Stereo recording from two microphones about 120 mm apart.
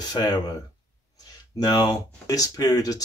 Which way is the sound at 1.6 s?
35° left (ahead or behind).